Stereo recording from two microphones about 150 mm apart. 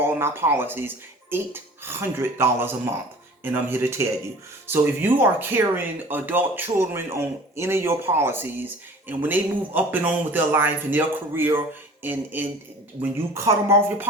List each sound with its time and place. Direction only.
0.0 s speech: 15° right (ahead or behind)